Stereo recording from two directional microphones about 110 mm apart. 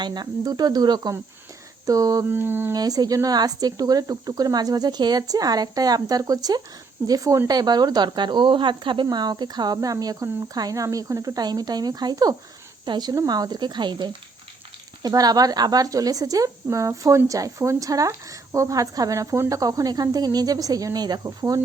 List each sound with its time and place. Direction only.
0.0 s speech: 40° right (ahead or behind)
2.3 s a sound: 20° right (ahead or behind)
2.7 s speech: 35° right (ahead or behind)